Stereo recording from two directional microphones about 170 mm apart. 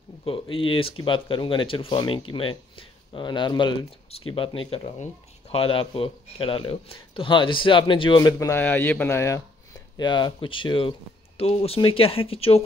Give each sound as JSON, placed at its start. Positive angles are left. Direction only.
{"t": 0.2, "sound": "speech", "side_deg": 30}